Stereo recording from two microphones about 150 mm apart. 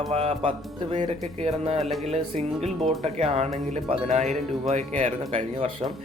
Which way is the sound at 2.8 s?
Centre (ahead or behind).